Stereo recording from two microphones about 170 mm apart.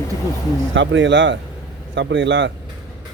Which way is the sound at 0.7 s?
90° right.